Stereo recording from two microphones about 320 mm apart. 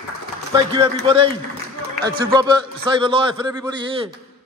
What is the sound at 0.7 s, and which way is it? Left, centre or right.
A man's voice, centre.